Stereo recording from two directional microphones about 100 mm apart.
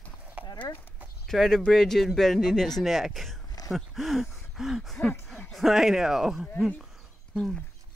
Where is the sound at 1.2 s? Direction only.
5° left (ahead or behind).